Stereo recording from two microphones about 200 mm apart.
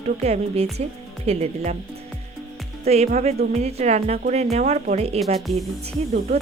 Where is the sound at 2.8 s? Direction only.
30° right (ahead or behind).